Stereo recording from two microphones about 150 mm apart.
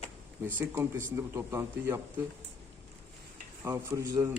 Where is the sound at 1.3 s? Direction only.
15° right (ahead or behind).